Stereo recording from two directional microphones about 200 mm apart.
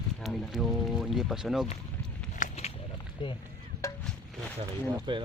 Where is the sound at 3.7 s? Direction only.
50° right (ahead or behind).